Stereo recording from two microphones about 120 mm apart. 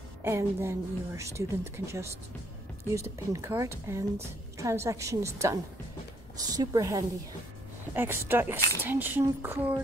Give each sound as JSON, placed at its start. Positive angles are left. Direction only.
{"t": 0.2, "sound": "a woman's voice", "side_deg": -20}
{"t": 7.9, "sound": "a woman's voice", "side_deg": -20}